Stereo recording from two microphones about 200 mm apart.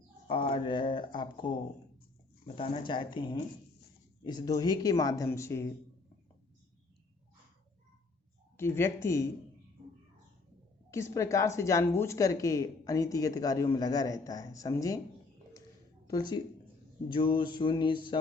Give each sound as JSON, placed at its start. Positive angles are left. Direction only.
{"t": 0.3, "sound": "speech", "side_deg": 25}
{"t": 8.5, "sound": "speech", "side_deg": 10}
{"t": 10.9, "sound": "speech", "side_deg": 15}
{"t": 16.0, "sound": "speech", "side_deg": 20}